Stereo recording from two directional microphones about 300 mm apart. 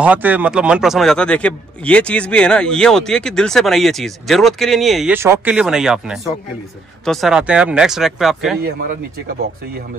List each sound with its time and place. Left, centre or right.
0.0 s speech: centre
8.6 s speech: right